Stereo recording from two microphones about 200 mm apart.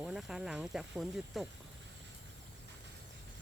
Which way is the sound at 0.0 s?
Centre (ahead or behind).